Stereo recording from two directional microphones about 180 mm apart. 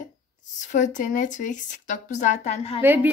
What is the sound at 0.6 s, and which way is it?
Speech, 45° left (ahead or behind).